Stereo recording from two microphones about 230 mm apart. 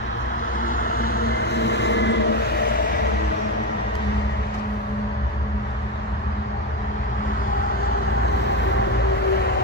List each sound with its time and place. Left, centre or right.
0.6 s vehicle: left